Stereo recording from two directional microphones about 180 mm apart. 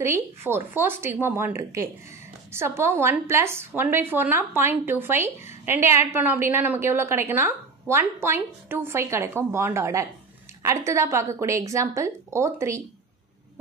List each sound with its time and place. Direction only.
0.0 s a woman's voice: 15° right (ahead or behind)